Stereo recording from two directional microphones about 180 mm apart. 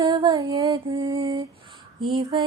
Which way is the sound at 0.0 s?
25° right (ahead or behind).